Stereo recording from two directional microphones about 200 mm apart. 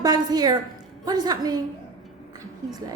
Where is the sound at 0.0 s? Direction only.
20° right (ahead or behind).